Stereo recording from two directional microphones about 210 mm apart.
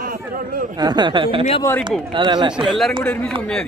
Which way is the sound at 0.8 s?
20° right (ahead or behind).